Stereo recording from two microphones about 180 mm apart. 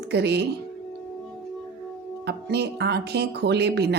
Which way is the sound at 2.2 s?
65° right (ahead or behind).